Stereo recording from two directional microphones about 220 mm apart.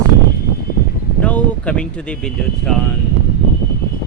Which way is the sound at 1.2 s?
5° left (ahead or behind).